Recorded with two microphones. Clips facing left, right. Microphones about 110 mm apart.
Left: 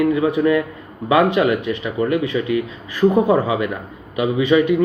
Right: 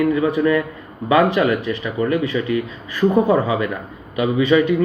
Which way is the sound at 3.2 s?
20° left (ahead or behind).